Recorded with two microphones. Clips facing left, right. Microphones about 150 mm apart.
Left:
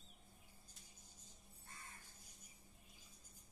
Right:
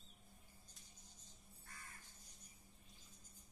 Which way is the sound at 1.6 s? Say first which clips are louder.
Left 1 dB; 25° left (ahead or behind).